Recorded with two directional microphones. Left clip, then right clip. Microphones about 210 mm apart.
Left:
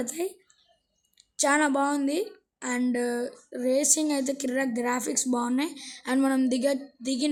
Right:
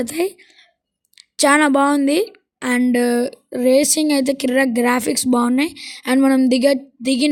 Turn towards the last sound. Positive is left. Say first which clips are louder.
# right 11 dB
turn(degrees=-30)  # may be behind; listen again after turning